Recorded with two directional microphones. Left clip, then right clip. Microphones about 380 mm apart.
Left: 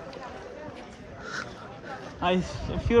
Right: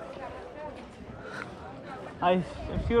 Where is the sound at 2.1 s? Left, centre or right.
Centre.